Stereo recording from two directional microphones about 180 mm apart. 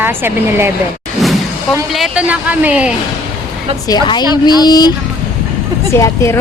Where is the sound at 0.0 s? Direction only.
10° right (ahead or behind).